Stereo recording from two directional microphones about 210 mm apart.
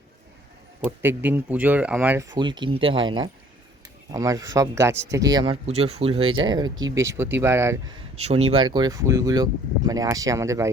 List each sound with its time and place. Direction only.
0.9 s speech: 10° right (ahead or behind)
2.3 s speech: 20° right (ahead or behind)
8.3 s speech: 30° right (ahead or behind); by 10.7 s 15° right (ahead or behind)